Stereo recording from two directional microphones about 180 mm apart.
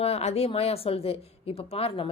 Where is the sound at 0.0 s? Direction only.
35° left (ahead or behind).